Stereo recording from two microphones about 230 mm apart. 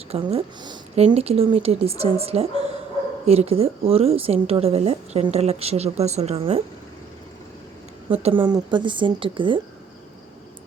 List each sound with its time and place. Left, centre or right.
0.1 s speech: right
8.1 s speech: right